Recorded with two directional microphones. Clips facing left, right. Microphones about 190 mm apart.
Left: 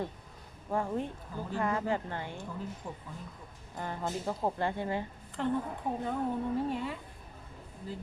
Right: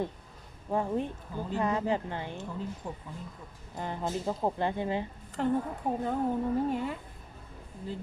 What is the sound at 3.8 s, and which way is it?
A woman's voice, 20° right (ahead or behind).